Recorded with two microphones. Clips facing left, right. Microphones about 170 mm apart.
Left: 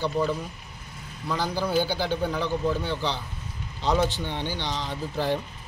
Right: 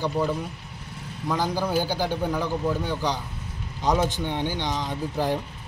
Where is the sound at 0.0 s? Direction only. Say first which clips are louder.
Right 1 dB; 10° right (ahead or behind).